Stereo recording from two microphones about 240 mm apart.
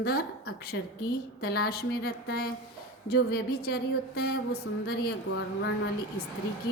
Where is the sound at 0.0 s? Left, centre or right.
Left.